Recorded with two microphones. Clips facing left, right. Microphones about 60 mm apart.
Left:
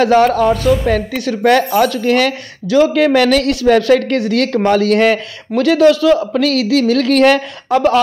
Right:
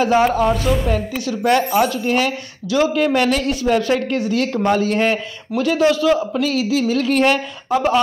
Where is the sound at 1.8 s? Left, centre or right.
Left.